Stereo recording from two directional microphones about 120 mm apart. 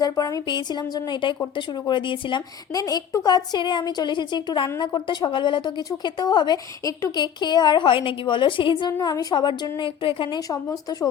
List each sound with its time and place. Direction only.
0.0 s a woman's voice: 30° left (ahead or behind)
2.7 s a woman's voice: 30° left (ahead or behind)